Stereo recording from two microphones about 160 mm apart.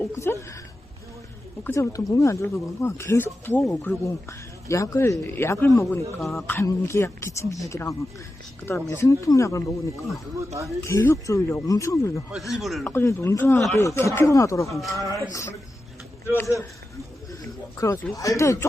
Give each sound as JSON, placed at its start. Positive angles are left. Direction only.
{"t": 0.0, "sound": "speech", "side_deg": 15}
{"t": 1.6, "sound": "speech", "side_deg": 15}
{"t": 6.1, "sound": "speech", "side_deg": 0}
{"t": 6.5, "sound": "speech", "side_deg": 15}
{"t": 10.8, "sound": "speech", "side_deg": 15}
{"t": 12.3, "sound": "speech", "side_deg": 0}
{"t": 12.8, "sound": "speech", "side_deg": 15}
{"t": 17.7, "sound": "speech", "side_deg": 20}